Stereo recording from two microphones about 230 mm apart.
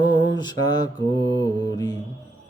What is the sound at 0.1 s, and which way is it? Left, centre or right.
Mantra, centre.